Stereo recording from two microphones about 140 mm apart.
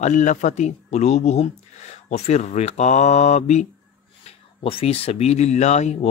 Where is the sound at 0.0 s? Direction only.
60° left (ahead or behind).